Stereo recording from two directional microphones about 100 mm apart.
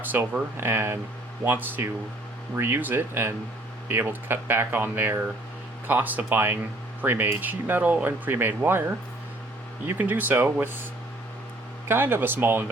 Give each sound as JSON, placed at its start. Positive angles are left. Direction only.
{"t": 0.0, "sound": "speech", "side_deg": -20}
{"t": 9.8, "sound": "speech", "side_deg": -20}
{"t": 11.9, "sound": "speech", "side_deg": -25}